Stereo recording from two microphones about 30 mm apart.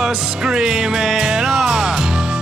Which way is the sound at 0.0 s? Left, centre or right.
Right.